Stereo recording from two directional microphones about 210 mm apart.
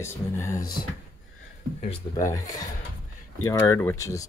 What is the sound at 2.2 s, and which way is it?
Speech, 15° left (ahead or behind).